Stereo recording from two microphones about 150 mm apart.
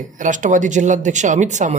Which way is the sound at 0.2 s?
55° right (ahead or behind).